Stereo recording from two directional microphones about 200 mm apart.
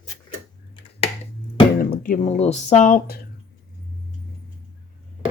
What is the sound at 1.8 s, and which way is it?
Speech, 45° left (ahead or behind).